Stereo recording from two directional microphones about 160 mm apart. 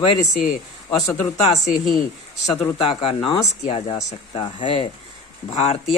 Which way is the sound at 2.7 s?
35° left (ahead or behind).